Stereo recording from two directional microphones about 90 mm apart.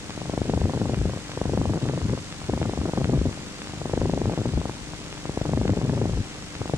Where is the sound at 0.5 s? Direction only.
25° right (ahead or behind).